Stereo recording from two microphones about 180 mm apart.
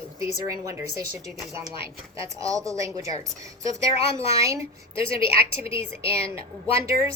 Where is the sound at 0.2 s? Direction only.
15° right (ahead or behind).